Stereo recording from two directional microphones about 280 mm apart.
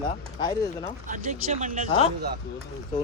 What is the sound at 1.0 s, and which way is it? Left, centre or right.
Speech, right.